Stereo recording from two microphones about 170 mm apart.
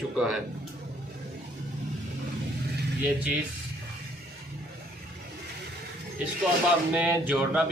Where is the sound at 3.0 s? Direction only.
10° right (ahead or behind).